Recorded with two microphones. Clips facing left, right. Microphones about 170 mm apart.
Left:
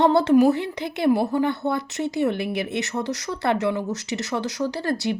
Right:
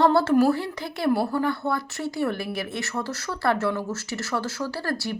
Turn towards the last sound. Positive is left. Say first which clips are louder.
# left 5 dB
turn(degrees=20)  # may be behind; listen again after turning